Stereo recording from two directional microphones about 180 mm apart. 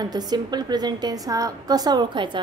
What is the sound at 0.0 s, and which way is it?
A woman's voice, 20° right (ahead or behind).